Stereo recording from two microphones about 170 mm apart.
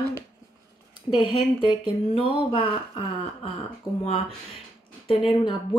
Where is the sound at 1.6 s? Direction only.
30° left (ahead or behind).